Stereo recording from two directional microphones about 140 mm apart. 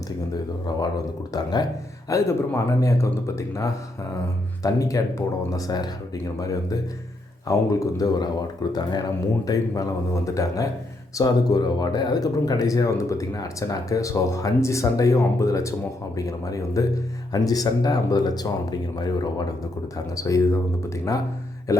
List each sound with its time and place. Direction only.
0.7 s speech: 30° left (ahead or behind)
21.7 s speech: 20° left (ahead or behind)